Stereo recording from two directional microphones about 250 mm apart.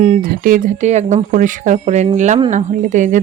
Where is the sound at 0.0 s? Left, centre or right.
Right.